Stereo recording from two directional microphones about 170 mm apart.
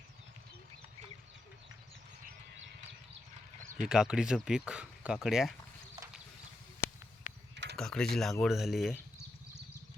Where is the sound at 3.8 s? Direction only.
5° right (ahead or behind).